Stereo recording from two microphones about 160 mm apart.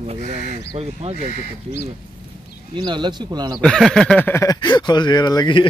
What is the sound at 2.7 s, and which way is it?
Speech, 30° right (ahead or behind).